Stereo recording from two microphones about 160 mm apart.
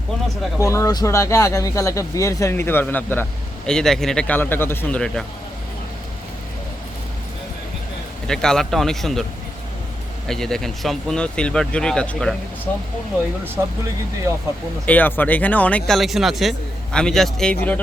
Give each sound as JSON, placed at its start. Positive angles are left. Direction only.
{"t": 0.6, "sound": "speech", "side_deg": 20}
{"t": 8.3, "sound": "speech", "side_deg": 5}
{"t": 10.2, "sound": "speech", "side_deg": 5}
{"t": 13.6, "sound": "speech", "side_deg": -15}
{"t": 14.8, "sound": "speech", "side_deg": 10}